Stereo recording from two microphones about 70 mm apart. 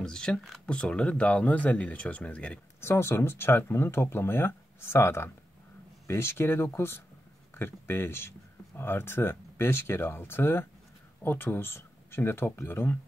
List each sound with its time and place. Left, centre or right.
0.0 s speech: centre
2.8 s speech: left